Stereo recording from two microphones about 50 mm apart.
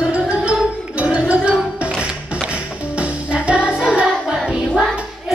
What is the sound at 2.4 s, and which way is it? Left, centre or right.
Music, right.